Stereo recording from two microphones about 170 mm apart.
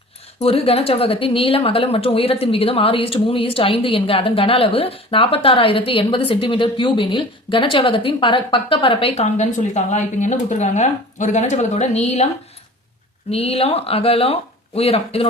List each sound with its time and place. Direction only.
0.3 s speech: 35° left (ahead or behind)
13.3 s speech: 35° left (ahead or behind)